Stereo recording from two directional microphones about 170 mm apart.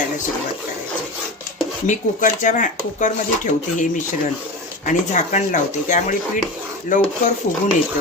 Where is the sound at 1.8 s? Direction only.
50° left (ahead or behind).